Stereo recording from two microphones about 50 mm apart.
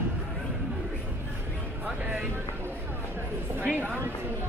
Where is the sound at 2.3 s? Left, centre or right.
Right.